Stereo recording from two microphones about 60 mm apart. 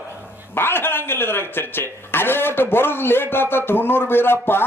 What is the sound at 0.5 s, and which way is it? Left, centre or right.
A man's voice, left.